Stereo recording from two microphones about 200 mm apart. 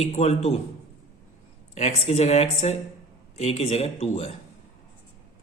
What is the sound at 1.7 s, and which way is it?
A man's voice, 30° left (ahead or behind).